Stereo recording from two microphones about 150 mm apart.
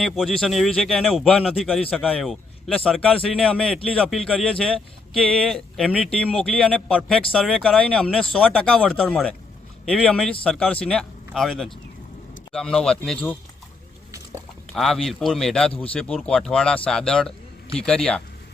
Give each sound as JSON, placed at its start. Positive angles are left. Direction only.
{"t": 0.0, "sound": "a man's voice", "side_deg": 5}
{"t": 14.7, "sound": "a man's voice", "side_deg": 0}